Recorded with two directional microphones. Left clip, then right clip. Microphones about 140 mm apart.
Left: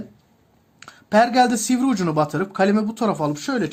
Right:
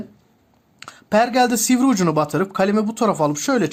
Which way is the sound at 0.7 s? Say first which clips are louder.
Left 1 dB; 35° right (ahead or behind).